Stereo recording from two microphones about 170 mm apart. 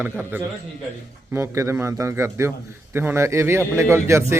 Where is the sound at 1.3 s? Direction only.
15° right (ahead or behind).